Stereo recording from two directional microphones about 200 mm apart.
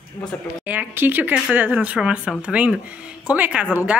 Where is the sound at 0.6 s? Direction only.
10° right (ahead or behind).